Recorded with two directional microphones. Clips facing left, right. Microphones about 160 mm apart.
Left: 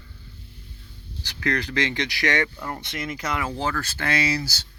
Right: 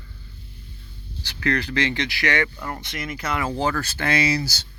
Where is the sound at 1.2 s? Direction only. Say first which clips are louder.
Right 2 dB; 15° left (ahead or behind).